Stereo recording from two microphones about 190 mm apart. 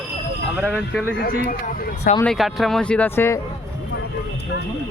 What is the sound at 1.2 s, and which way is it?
Speech, 50° left (ahead or behind).